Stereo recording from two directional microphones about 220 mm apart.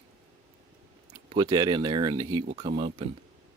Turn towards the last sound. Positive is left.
turn(degrees=-25)  # may be behind; listen again after turning